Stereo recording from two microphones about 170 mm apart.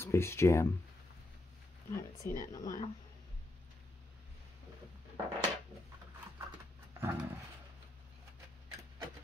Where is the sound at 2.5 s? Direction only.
20° left (ahead or behind).